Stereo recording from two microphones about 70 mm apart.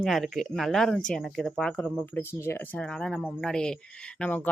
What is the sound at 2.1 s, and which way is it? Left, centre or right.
Speech, left.